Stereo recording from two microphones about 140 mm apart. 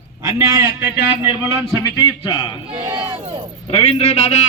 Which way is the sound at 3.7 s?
45° left (ahead or behind).